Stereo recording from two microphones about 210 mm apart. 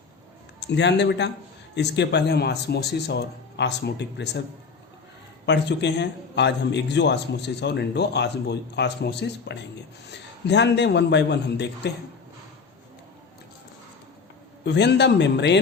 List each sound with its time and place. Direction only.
0.6 s a man's voice: 55° left (ahead or behind)
5.5 s a man's voice: 55° left (ahead or behind)
14.6 s a man's voice: 55° left (ahead or behind)